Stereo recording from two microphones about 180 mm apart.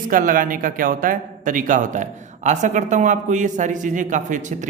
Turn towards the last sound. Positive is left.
turn(degrees=-45)  # may be behind; listen again after turning